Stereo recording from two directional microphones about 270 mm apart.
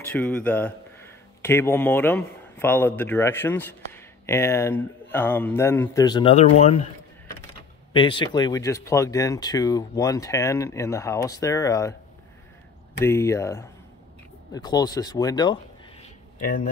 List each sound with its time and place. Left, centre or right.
0.0 s a man's voice: centre; by 6.9 s left
7.9 s speech: centre
13.0 s speech: centre
16.3 s speech: left